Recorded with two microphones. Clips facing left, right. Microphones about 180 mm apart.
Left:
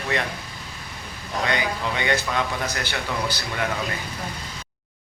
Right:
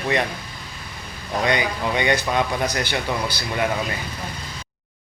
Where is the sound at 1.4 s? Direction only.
15° right (ahead or behind).